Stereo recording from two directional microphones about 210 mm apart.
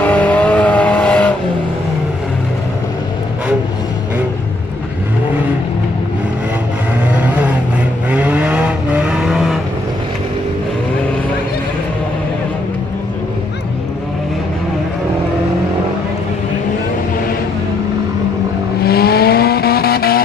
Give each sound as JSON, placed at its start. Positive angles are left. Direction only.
{"t": 0.0, "sound": "vehicle", "side_deg": 5}
{"t": 7.1, "sound": "vehicle", "side_deg": -5}
{"t": 18.8, "sound": "vehicle", "side_deg": 50}